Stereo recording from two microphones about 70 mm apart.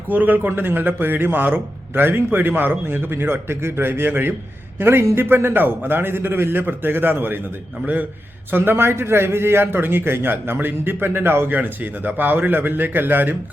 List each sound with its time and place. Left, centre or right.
0.1 s a man's voice: right
8.4 s a man's voice: right